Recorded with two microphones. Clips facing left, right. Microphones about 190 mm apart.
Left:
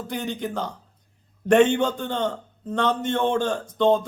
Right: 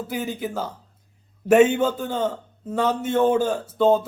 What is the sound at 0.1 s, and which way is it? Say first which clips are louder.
A man's voice: left 1 dB; 5° right (ahead or behind).